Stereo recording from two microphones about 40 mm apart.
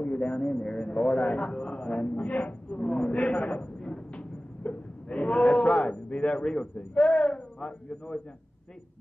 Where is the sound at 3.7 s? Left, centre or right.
Centre.